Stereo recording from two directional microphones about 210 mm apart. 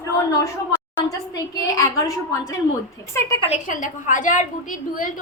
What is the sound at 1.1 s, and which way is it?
A woman's voice, 15° left (ahead or behind).